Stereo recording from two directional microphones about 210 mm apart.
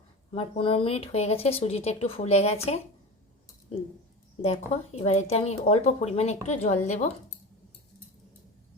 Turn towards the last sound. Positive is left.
turn(degrees=35)  # may be behind; listen again after turning